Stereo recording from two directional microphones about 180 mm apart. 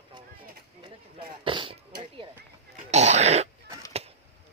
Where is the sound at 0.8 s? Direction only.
25° right (ahead or behind).